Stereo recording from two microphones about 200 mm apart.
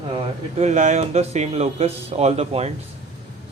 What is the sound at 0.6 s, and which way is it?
Speech, 35° right (ahead or behind).